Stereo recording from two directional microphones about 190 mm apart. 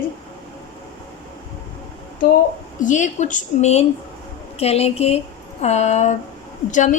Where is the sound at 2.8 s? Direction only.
40° left (ahead or behind).